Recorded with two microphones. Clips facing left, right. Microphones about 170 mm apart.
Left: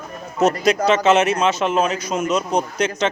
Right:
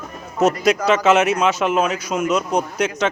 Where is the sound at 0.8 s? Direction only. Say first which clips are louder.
Even; 5° right (ahead or behind).